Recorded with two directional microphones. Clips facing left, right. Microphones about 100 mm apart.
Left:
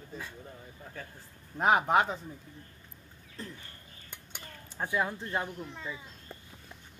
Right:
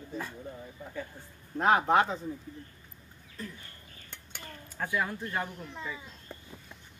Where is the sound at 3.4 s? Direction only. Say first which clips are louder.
Right 1 dB; 30° left (ahead or behind).